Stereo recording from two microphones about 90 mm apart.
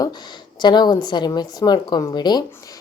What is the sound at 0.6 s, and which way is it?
A woman's voice, 55° left (ahead or behind).